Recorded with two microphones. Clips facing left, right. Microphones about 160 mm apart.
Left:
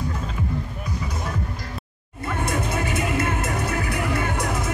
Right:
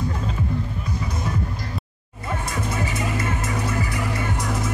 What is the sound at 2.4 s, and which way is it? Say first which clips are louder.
Music: left 3 dB; 55° left (ahead or behind).